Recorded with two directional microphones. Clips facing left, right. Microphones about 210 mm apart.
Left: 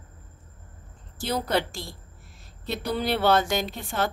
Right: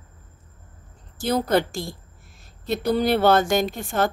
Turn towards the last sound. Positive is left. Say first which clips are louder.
# right 5 dB
turn(degrees=-45)  # may be behind; listen again after turning